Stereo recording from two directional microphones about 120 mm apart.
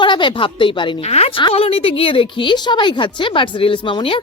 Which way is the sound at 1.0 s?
55° left (ahead or behind).